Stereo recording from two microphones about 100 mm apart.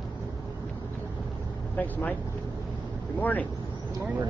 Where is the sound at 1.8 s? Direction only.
15° left (ahead or behind).